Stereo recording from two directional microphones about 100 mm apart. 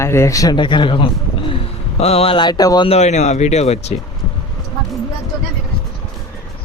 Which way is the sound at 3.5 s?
90° left.